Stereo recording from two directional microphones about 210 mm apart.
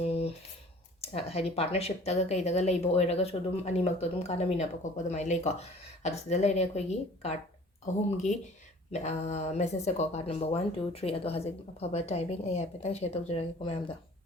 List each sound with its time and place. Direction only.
0.0 s a sound: 30° left (ahead or behind)
1.0 s speech: 30° left (ahead or behind)
8.9 s speech: 30° left (ahead or behind)